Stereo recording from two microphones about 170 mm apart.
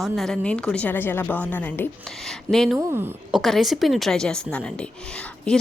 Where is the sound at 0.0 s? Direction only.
Centre (ahead or behind).